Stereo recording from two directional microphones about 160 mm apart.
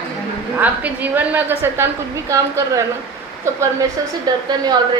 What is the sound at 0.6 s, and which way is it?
A woman's voice, 10° right (ahead or behind).